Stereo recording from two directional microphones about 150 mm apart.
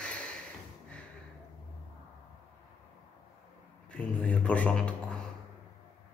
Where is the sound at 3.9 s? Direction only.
5° left (ahead or behind).